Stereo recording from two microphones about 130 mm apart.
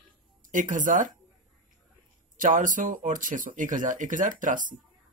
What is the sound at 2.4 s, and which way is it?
Speech, 90° right.